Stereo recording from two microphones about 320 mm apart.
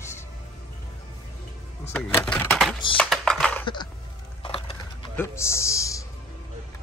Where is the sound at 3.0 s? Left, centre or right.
Centre.